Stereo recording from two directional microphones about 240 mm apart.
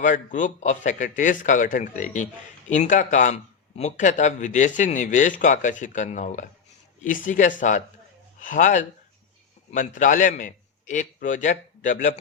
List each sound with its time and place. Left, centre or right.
0.0 s a man's voice: left